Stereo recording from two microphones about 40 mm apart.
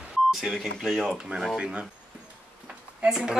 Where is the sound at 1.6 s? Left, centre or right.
Right.